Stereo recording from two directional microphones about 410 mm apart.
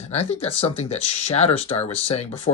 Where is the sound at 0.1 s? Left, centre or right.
Centre.